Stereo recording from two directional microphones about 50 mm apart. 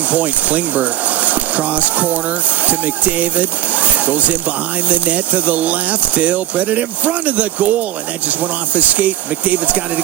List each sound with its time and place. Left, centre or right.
0.1 s speech: right